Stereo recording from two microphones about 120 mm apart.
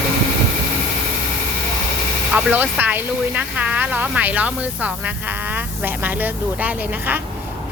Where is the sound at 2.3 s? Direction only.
10° right (ahead or behind).